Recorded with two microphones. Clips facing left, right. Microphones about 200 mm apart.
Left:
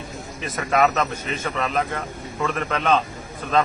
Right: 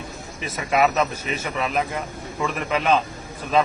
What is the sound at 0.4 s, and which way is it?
A man's voice, 5° right (ahead or behind).